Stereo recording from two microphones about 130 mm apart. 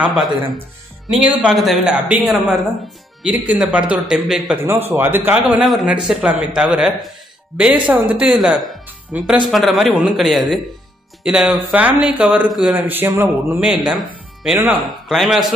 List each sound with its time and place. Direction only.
1.1 s speech: 5° right (ahead or behind)
4.6 s speech: 15° right (ahead or behind)